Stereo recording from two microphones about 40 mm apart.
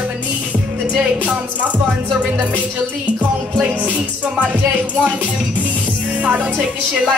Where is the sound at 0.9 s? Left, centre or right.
Right.